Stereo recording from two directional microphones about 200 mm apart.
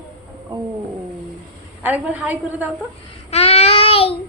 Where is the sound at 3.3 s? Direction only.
30° left (ahead or behind).